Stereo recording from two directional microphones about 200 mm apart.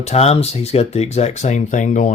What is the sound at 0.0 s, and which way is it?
Speech, 35° left (ahead or behind).